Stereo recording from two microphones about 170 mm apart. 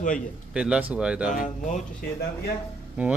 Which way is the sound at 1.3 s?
50° left (ahead or behind).